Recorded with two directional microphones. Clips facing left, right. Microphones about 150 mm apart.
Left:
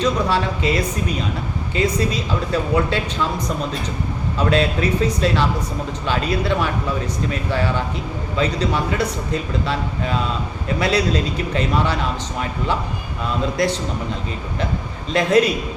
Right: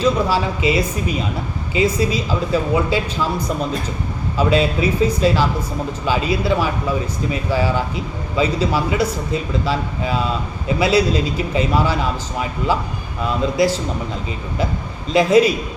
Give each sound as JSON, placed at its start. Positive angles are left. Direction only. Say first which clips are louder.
{"t": 0.0, "sound": "speech", "louder": "right 2 dB", "side_deg": -5}
{"t": 13.6, "sound": "speech", "louder": "right 4 dB", "side_deg": -5}
{"t": 15.1, "sound": "speech", "louder": "right 3 dB", "side_deg": -5}